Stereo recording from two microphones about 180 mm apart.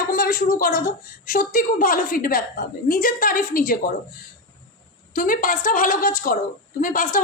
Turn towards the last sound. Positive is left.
turn(degrees=50)  # may be behind; listen again after turning